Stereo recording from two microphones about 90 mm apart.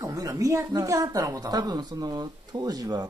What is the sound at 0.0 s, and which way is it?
A woman's voice, 40° right (ahead or behind).